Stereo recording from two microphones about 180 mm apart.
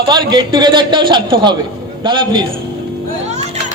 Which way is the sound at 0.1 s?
25° right (ahead or behind).